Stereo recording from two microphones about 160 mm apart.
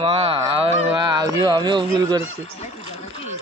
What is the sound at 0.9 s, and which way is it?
Speech, 25° right (ahead or behind).